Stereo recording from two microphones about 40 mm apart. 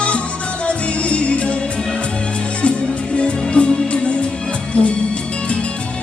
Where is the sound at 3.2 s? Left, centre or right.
Left.